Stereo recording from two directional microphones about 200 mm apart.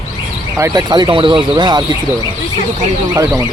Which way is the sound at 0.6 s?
20° right (ahead or behind).